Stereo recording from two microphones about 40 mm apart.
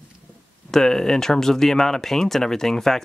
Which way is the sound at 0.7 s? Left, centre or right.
Centre.